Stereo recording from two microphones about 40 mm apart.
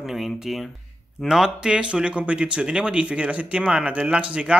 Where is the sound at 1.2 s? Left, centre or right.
Centre.